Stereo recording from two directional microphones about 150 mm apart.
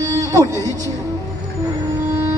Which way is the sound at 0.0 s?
25° right (ahead or behind).